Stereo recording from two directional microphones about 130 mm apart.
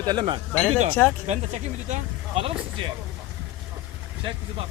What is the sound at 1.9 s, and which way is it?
Speech, 50° right (ahead or behind).